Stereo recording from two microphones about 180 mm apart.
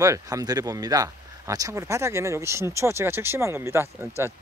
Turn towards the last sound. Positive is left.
turn(degrees=-15)  # may be behind; listen again after turning